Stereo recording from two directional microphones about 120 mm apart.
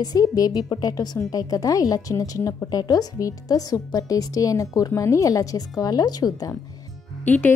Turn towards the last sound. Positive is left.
turn(degrees=15)  # may be behind; listen again after turning